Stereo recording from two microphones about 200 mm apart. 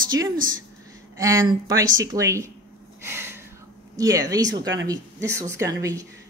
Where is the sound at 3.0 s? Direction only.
10° right (ahead or behind).